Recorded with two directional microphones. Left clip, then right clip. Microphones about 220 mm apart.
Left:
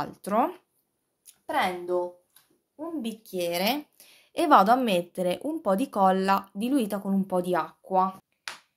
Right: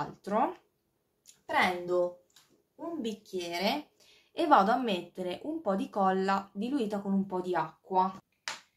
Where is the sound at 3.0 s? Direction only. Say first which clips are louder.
Left 6 dB; 50° left (ahead or behind).